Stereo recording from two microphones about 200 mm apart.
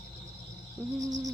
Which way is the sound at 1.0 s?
20° right (ahead or behind).